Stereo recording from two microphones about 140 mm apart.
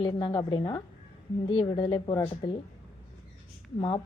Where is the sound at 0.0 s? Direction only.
35° left (ahead or behind).